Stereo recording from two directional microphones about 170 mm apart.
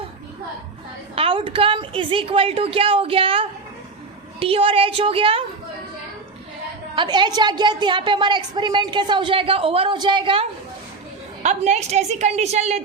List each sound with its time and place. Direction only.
1.1 s a woman's voice: 35° right (ahead or behind)
6.9 s a woman's voice: 25° right (ahead or behind)
11.4 s a woman's voice: 40° right (ahead or behind)